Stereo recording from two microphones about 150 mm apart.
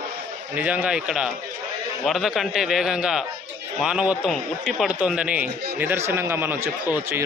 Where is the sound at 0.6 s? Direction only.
10° right (ahead or behind).